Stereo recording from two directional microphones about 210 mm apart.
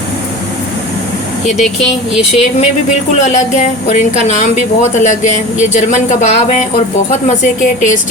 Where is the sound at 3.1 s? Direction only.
35° left (ahead or behind).